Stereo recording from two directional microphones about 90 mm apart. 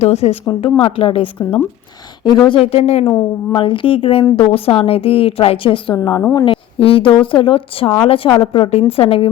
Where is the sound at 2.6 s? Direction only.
90° left.